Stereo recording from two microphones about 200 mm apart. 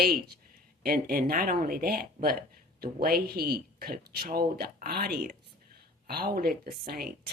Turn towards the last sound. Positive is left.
turn(degrees=-50)  # may be behind; listen again after turning